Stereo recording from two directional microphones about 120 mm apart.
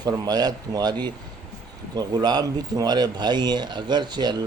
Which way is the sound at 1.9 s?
35° right (ahead or behind).